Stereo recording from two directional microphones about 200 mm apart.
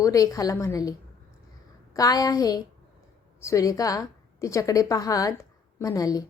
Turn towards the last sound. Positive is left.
turn(degrees=20)  # may be behind; listen again after turning